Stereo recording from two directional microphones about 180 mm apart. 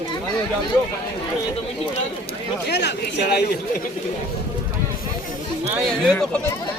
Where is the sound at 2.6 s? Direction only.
70° left (ahead or behind).